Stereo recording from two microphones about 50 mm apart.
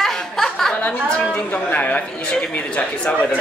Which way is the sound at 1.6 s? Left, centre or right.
Left.